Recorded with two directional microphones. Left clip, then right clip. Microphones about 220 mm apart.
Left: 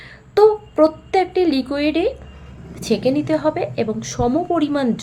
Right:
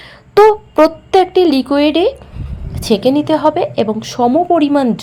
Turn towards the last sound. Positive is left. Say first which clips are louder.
# right 8 dB
turn(degrees=-20)  # may be behind; listen again after turning